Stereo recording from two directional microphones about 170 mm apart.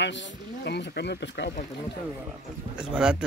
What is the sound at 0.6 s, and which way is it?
Speech, 80° left.